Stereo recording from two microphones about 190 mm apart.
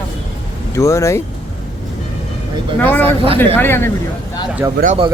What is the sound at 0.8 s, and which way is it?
Speech, 15° left (ahead or behind).